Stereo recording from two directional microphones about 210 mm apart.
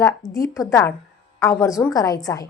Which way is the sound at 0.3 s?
15° left (ahead or behind).